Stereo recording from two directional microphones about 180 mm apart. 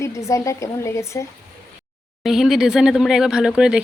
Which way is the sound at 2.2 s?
Centre (ahead or behind).